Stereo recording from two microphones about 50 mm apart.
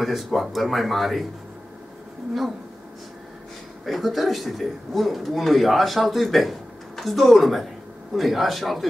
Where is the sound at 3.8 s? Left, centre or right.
Centre.